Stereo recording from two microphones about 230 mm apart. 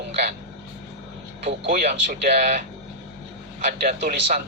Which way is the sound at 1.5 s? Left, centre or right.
Right.